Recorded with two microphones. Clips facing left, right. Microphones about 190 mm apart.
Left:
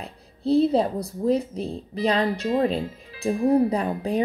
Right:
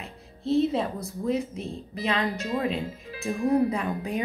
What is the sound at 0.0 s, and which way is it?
A woman's voice, 35° left (ahead or behind).